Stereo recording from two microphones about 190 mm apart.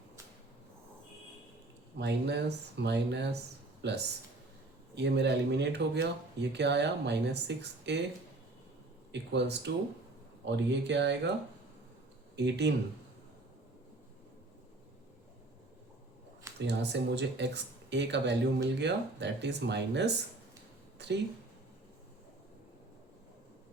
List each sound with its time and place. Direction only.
2.0 s speech: 65° right (ahead or behind)
9.1 s speech: 65° right (ahead or behind)
12.4 s speech: 65° right (ahead or behind)
16.6 s speech: 65° right (ahead or behind)